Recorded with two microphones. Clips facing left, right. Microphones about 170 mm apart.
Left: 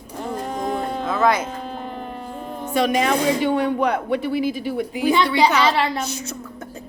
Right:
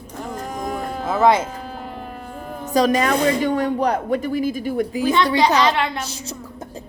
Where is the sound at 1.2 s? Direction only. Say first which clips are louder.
Right 3 dB; 25° right (ahead or behind).